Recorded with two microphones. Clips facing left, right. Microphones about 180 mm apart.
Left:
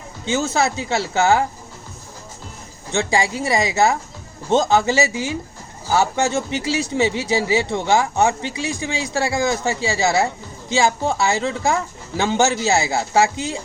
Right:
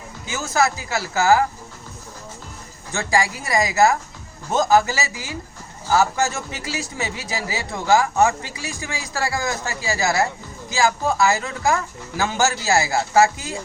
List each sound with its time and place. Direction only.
0.3 s speech: 25° left (ahead or behind)
2.9 s speech: 25° left (ahead or behind)